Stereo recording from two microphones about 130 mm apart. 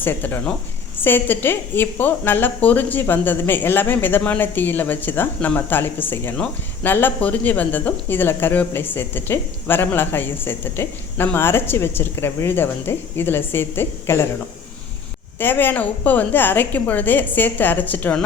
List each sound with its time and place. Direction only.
0.0 s a woman's voice: 15° left (ahead or behind)
15.4 s a woman's voice: 15° left (ahead or behind)